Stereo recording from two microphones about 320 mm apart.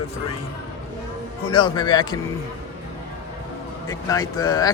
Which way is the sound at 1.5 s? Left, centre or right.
Centre.